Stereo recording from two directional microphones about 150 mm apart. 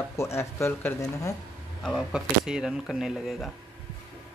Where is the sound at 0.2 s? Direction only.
20° left (ahead or behind).